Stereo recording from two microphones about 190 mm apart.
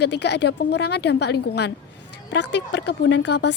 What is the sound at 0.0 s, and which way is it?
Speech, 65° left (ahead or behind).